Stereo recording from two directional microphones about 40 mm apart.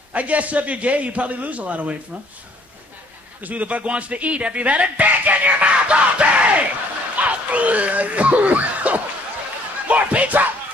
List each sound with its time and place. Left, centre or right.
0.1 s a man's voice: right
3.4 s speech: right
9.8 s a sound: right